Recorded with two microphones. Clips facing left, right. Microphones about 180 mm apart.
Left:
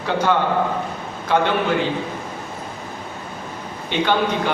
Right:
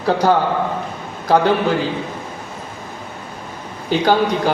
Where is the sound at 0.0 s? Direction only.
35° right (ahead or behind).